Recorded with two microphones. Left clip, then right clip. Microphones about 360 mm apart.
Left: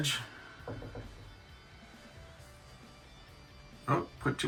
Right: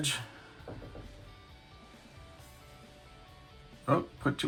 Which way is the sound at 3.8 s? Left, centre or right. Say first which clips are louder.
Right 2 dB; centre.